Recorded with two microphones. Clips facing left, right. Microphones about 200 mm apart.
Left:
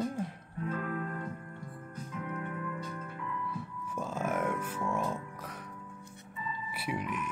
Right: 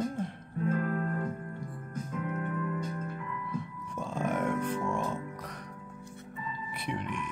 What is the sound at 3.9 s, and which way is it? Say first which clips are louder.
Music: right 1 dB; 5° left (ahead or behind).